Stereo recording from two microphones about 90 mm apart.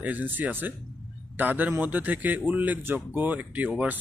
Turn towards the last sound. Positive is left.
turn(degrees=-15)  # may be behind; listen again after turning